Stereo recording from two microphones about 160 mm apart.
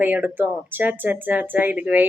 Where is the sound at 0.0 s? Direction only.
10° right (ahead or behind).